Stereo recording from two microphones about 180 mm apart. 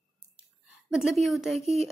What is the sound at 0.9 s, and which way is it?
Speech, centre (ahead or behind).